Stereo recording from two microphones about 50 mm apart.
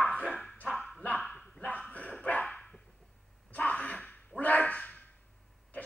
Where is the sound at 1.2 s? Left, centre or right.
Centre.